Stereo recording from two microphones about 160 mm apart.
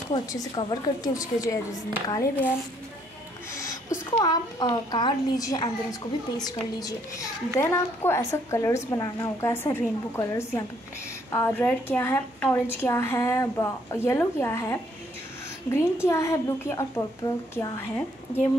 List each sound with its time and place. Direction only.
0.1 s a woman's voice: 25° left (ahead or behind)
4.2 s a woman's voice: 25° left (ahead or behind)